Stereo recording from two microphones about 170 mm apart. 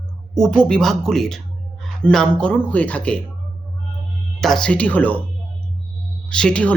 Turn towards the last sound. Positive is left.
turn(degrees=5)  # may be behind; listen again after turning